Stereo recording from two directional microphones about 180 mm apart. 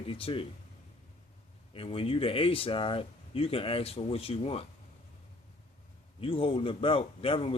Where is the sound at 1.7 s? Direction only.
30° left (ahead or behind).